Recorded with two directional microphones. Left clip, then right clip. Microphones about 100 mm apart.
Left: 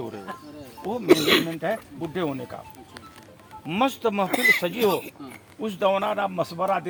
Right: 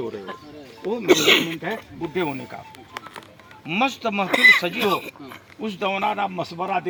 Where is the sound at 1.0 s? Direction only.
5° right (ahead or behind).